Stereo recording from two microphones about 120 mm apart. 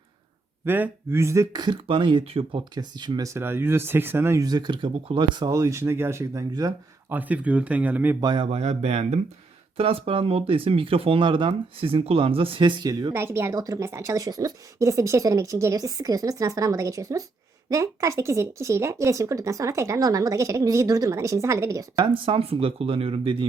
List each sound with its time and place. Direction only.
0.6 s speech: 20° right (ahead or behind); by 5.5 s 40° right (ahead or behind)
5.5 s a woman's voice: 25° right (ahead or behind)
7.1 s speech: 15° right (ahead or behind)
8.4 s speech: 60° right (ahead or behind)
9.7 s speech: 50° right (ahead or behind)
13.1 s a woman's voice: 20° right (ahead or behind)
22.0 s speech: 50° right (ahead or behind)